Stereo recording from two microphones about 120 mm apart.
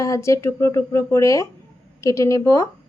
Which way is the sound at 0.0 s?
25° left (ahead or behind).